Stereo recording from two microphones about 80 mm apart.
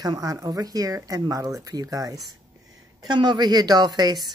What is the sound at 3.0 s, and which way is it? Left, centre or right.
A woman's voice, right.